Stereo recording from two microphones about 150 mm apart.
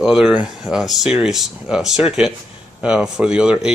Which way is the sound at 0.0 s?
5° right (ahead or behind).